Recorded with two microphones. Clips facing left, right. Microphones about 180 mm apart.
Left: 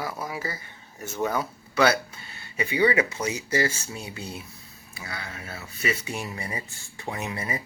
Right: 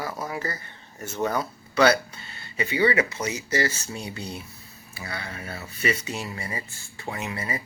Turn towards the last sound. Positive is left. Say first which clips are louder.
# even
turn(degrees=20)  # may be behind; listen again after turning